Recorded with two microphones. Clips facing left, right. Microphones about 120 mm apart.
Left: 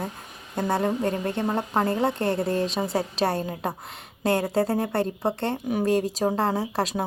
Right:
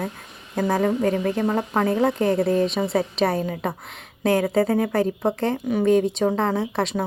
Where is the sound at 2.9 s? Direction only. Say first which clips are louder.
Right 2 dB; 35° left (ahead or behind).